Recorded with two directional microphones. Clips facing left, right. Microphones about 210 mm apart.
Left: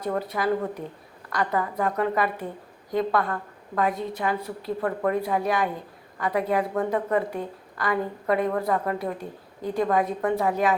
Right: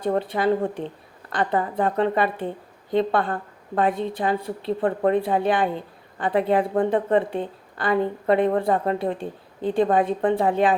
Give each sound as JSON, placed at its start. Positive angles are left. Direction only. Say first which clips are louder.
{"t": 0.0, "sound": "speech", "louder": "right 4 dB", "side_deg": -30}